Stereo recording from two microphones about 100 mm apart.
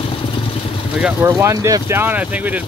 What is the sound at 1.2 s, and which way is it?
Speech, 30° right (ahead or behind).